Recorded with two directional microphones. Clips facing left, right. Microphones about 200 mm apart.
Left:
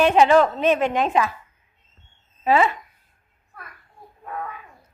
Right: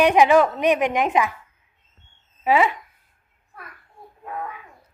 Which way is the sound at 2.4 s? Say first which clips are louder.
Even; 15° right (ahead or behind).